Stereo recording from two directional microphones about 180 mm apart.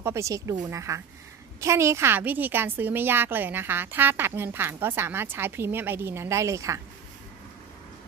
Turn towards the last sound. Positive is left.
turn(degrees=-15)  # may be behind; listen again after turning